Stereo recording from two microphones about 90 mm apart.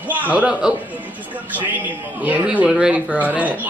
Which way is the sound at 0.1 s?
20° right (ahead or behind).